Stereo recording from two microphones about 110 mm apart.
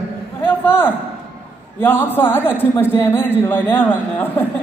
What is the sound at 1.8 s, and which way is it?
A woman's voice, 20° left (ahead or behind).